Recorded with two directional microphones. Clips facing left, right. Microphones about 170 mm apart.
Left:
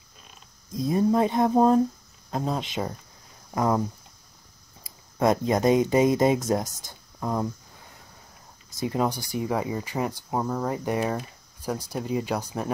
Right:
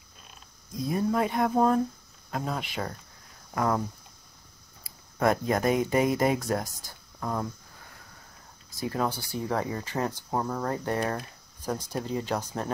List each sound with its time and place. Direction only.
0.8 s speech: 25° left (ahead or behind)
4.8 s speech: 20° left (ahead or behind)
8.7 s speech: 20° left (ahead or behind)